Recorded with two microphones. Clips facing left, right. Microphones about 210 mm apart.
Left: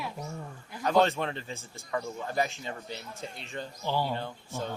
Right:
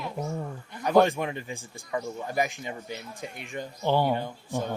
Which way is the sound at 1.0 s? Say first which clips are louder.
Right 2 dB; 15° right (ahead or behind).